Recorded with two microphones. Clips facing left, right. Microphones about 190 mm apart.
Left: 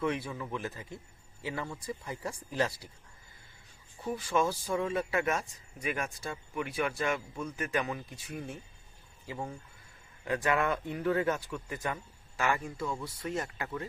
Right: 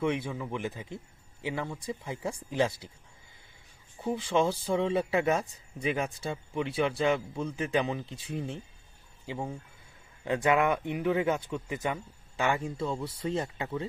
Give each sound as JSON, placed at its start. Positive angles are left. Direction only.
{"t": 0.0, "sound": "speech", "side_deg": -20}
{"t": 4.0, "sound": "speech", "side_deg": -25}